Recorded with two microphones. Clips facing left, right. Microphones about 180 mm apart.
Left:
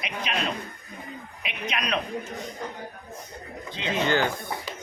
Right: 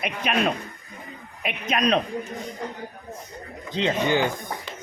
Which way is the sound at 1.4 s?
45° right (ahead or behind).